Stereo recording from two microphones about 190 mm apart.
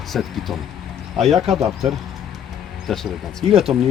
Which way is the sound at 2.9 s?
Centre (ahead or behind).